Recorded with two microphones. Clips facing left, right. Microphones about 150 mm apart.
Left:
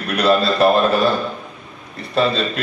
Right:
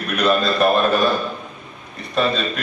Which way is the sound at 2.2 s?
30° left (ahead or behind).